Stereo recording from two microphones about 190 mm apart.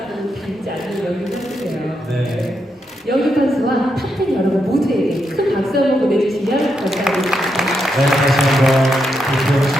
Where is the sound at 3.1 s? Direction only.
Centre (ahead or behind).